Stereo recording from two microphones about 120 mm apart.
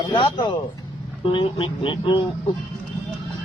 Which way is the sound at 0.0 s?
40° left (ahead or behind).